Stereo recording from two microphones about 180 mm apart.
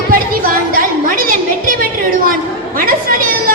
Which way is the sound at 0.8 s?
50° right (ahead or behind).